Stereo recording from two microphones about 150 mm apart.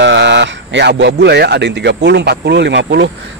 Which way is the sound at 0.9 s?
90° right.